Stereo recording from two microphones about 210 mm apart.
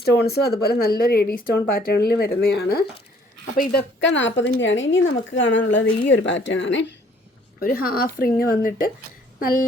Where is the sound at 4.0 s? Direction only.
60° left (ahead or behind).